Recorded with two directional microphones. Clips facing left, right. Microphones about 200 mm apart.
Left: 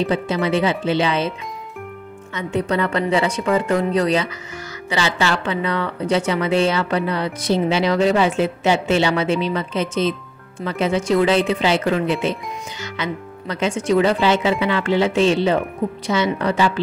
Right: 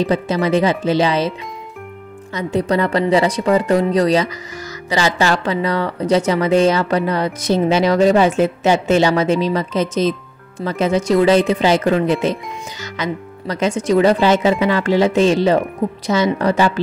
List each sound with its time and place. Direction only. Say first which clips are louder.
0.0 s a woman's voice: right 3 dB; 40° right (ahead or behind)
2.3 s a woman's voice: right 3 dB; 35° right (ahead or behind)